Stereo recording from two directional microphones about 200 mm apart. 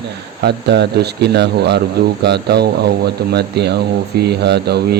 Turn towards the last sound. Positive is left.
turn(degrees=-55)  # may be behind; listen again after turning